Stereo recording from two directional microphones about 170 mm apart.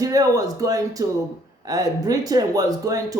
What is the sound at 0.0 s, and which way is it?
Speech, 20° right (ahead or behind).